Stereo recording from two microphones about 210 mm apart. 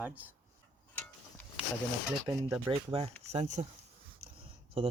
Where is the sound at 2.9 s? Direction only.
30° right (ahead or behind).